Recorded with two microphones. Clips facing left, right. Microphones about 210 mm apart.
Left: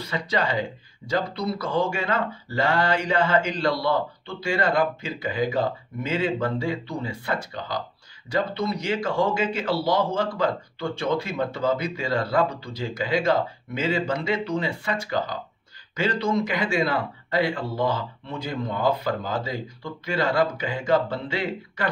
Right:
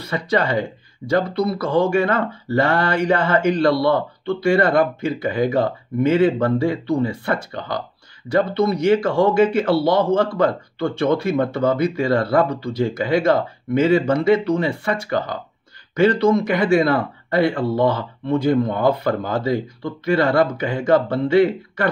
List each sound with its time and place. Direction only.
0.0 s speech: 55° right (ahead or behind)
16.0 s speech: 55° right (ahead or behind)